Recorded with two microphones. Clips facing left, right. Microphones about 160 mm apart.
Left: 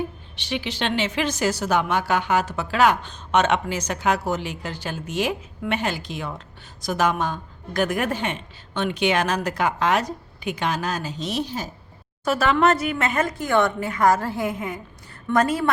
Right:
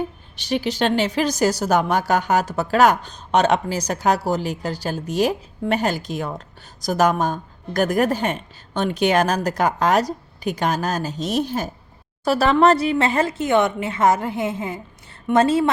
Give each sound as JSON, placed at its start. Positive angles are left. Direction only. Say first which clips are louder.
{"t": 0.3, "sound": "speech", "louder": "right 6 dB", "side_deg": -40}
{"t": 12.2, "sound": "speech", "louder": "right 3 dB", "side_deg": -35}